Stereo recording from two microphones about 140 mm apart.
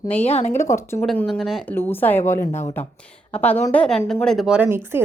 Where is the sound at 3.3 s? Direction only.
10° left (ahead or behind); by 5.0 s 15° right (ahead or behind).